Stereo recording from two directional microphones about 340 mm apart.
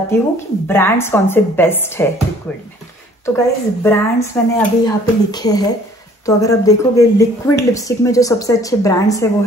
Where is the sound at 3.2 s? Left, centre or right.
Centre.